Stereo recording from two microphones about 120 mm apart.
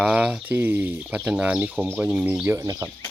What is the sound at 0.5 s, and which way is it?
Speech, 15° right (ahead or behind).